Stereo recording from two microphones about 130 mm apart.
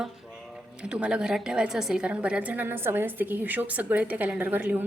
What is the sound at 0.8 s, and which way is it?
A woman's voice, 10° right (ahead or behind).